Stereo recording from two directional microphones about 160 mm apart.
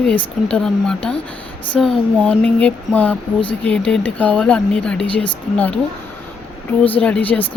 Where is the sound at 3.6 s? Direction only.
5° left (ahead or behind).